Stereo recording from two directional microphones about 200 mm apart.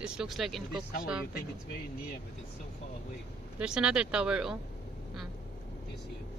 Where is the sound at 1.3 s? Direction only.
50° left (ahead or behind).